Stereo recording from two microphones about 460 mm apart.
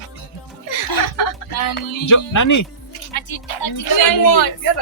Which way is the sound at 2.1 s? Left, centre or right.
Left.